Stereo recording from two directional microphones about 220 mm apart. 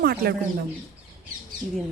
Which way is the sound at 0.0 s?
45° right (ahead or behind).